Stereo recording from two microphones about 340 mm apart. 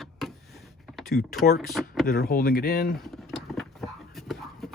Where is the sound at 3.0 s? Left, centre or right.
Centre.